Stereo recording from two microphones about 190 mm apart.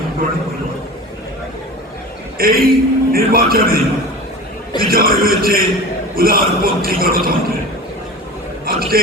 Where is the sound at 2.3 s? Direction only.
50° right (ahead or behind).